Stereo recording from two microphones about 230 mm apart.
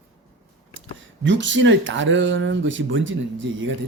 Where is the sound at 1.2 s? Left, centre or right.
Right.